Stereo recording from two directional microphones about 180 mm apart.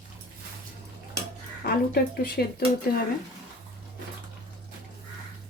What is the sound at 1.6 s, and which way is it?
Speech, 60° left (ahead or behind).